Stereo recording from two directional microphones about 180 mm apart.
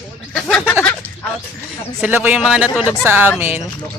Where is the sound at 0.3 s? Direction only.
Centre (ahead or behind).